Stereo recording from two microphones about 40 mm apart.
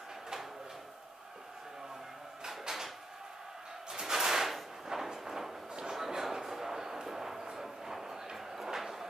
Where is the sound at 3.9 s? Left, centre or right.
Centre.